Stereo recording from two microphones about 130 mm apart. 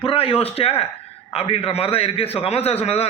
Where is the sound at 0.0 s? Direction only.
45° left (ahead or behind).